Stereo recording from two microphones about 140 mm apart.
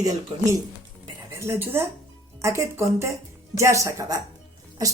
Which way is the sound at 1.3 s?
20° right (ahead or behind).